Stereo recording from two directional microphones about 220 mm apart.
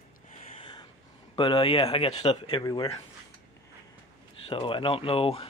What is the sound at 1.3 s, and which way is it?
Speech, 25° left (ahead or behind).